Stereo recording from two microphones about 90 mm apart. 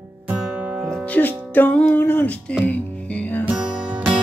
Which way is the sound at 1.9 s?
20° left (ahead or behind).